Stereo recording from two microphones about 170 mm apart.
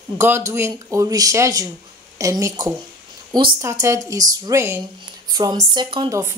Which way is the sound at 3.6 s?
15° right (ahead or behind).